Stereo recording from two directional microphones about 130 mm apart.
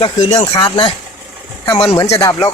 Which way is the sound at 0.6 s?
40° left (ahead or behind).